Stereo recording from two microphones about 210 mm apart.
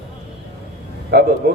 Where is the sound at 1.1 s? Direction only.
50° right (ahead or behind).